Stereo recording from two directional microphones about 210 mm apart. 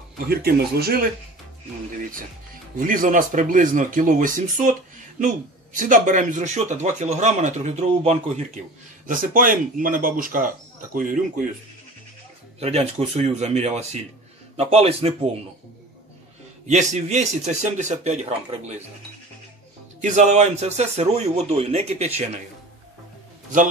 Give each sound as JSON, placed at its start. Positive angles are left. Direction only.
{"t": 0.3, "sound": "speech", "side_deg": -45}
{"t": 2.8, "sound": "speech", "side_deg": -40}
{"t": 9.0, "sound": "speech", "side_deg": -40}
{"t": 12.5, "sound": "a man's voice", "side_deg": -30}
{"t": 16.6, "sound": "speech", "side_deg": -35}
{"t": 20.0, "sound": "speech", "side_deg": -35}